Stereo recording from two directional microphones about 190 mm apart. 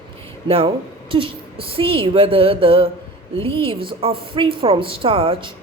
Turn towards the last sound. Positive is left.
turn(degrees=-30)  # may be behind; listen again after turning